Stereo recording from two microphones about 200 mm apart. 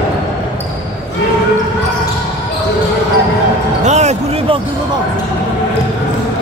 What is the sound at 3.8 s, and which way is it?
Basketball bounce, 35° right (ahead or behind).